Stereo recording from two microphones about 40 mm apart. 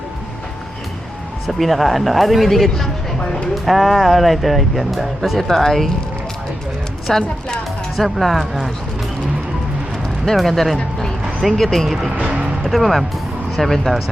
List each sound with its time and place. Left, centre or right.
1.5 s speech: centre
5.4 s speech: centre
7.1 s speech: centre
10.2 s speech: centre
12.1 s speech: right
12.6 s speech: centre